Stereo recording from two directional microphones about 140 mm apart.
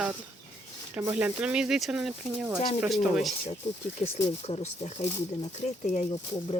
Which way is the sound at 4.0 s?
50° left (ahead or behind).